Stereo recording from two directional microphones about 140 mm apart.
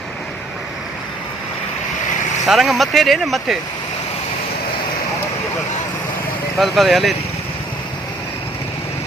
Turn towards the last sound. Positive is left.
turn(degrees=0)  # may be behind; listen again after turning